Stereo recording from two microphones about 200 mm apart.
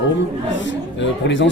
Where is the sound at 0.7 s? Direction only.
65° left (ahead or behind).